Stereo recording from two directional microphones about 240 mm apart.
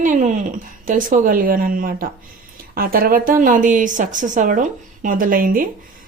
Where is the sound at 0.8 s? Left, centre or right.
Right.